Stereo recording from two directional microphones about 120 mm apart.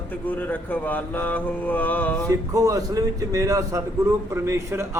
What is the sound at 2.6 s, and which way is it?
A man's voice, 30° right (ahead or behind).